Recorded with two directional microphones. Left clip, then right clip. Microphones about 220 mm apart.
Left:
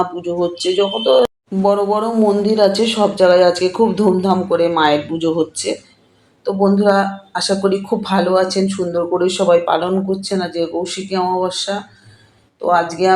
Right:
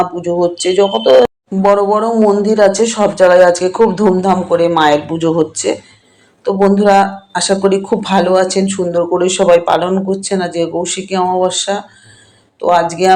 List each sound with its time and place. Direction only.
0.0 s speech: 15° right (ahead or behind)